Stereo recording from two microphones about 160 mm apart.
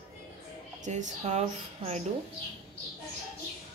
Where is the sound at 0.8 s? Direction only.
50° right (ahead or behind).